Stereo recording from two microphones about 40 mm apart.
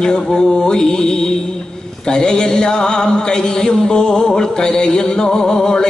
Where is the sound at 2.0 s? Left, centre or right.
Centre.